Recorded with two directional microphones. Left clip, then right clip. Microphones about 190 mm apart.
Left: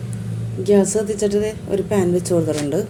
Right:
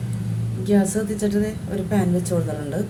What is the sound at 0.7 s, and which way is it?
A woman's voice, 40° left (ahead or behind).